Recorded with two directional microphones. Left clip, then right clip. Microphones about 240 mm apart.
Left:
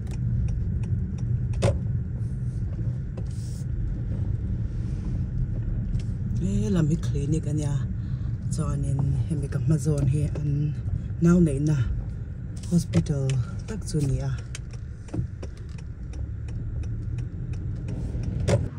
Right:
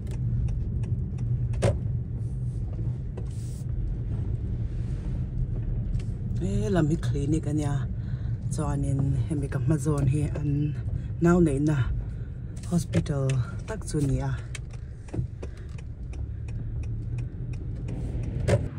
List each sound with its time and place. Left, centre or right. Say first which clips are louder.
0.1 s vehicle: left 2 dB; centre
5.9 s a sound: even; centre
8.5 s speech: right 2 dB; centre
10.5 s speech: right 2 dB; right
11.1 s speech: right 1 dB; centre
12.7 s speech: left 1 dB; centre
17.8 s vehicle: left 1 dB; centre